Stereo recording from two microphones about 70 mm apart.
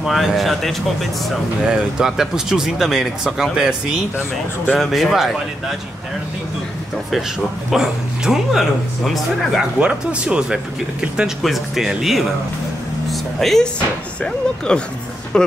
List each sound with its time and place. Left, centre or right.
0.0 s speech: centre
7.7 s speech: centre
9.8 s speech: centre
14.7 s speech: centre